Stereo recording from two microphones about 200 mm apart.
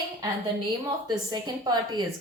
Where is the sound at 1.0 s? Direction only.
20° right (ahead or behind).